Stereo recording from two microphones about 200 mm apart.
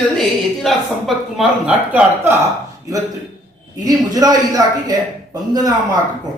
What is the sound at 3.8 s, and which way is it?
Speech, 20° right (ahead or behind).